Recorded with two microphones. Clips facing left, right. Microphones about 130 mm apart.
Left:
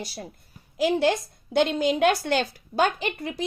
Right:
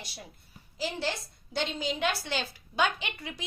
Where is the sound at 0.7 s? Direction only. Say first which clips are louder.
Left 11 dB; 55° left (ahead or behind).